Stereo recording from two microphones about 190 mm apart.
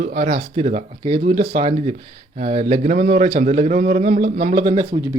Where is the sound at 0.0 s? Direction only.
40° right (ahead or behind).